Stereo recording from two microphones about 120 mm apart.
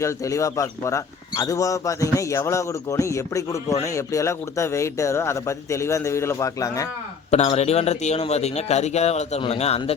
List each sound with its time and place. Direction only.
0.0 s a man's voice: 25° left (ahead or behind)
7.3 s a man's voice: 65° left (ahead or behind)